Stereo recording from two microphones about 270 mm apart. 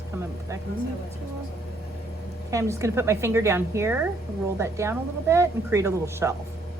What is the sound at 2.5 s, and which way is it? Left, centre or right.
A woman's voice, centre.